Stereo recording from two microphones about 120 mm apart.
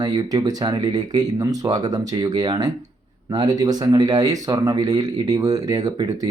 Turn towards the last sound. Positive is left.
turn(degrees=-35)  # may be behind; listen again after turning